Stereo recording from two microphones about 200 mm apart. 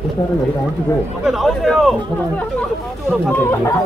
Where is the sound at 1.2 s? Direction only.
Centre (ahead or behind).